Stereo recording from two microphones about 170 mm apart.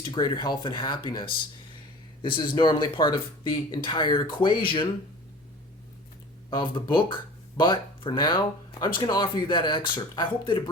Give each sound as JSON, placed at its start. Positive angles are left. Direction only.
{"t": 0.0, "sound": "speech", "side_deg": 25}
{"t": 6.5, "sound": "speech", "side_deg": 25}